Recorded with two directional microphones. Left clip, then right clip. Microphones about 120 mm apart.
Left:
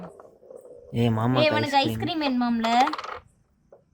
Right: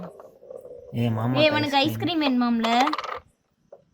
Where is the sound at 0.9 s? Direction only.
80° left.